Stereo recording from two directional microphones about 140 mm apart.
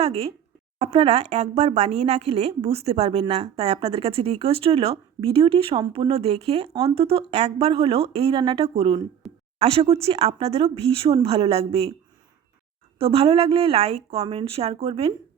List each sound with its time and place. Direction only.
0.0 s a woman's voice: 45° right (ahead or behind)
8.3 s speech: 30° right (ahead or behind)
8.6 s a woman's voice: 45° right (ahead or behind)
9.2 s a sound: centre (ahead or behind)
9.6 s a woman's voice: 45° right (ahead or behind)
13.0 s a woman's voice: 40° right (ahead or behind)